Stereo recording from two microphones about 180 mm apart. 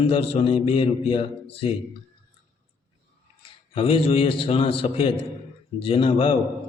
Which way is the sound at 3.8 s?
30° left (ahead or behind).